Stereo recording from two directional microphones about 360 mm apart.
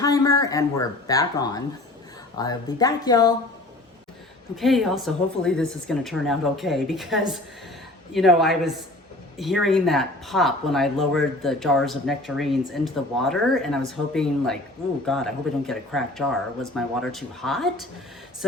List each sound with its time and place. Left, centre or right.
0.0 s speech: centre
4.5 s speech: centre